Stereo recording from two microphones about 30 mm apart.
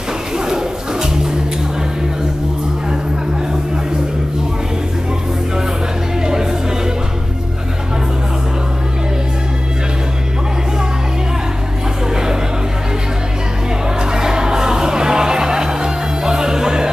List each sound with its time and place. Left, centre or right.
14.1 s music: right